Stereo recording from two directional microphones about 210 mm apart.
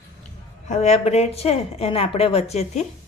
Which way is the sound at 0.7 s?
30° left (ahead or behind).